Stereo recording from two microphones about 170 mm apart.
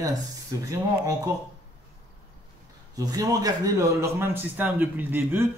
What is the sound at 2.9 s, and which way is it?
A man's voice, 20° right (ahead or behind).